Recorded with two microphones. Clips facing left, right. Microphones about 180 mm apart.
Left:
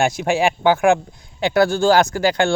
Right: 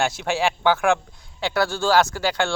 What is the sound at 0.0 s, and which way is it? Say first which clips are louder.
Speech: left 5 dB; 15° left (ahead or behind).